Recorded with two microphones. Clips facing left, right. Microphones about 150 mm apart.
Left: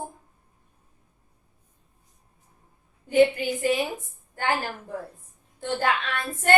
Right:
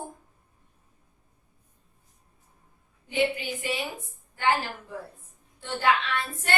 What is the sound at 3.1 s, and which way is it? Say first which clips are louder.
Speech: left 7 dB; 45° left (ahead or behind).